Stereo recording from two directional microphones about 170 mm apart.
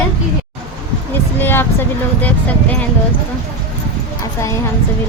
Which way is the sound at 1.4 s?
15° left (ahead or behind).